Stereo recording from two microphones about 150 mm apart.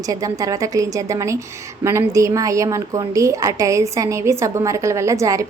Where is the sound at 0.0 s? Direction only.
25° right (ahead or behind).